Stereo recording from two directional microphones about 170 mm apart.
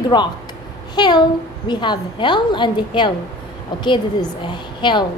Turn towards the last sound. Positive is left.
turn(degrees=30)  # may be behind; listen again after turning